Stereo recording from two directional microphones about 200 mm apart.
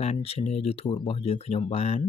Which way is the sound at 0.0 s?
30° left (ahead or behind).